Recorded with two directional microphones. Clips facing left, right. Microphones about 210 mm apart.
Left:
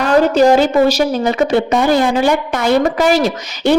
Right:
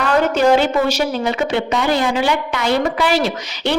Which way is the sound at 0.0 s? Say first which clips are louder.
Left 4 dB; 40° left (ahead or behind).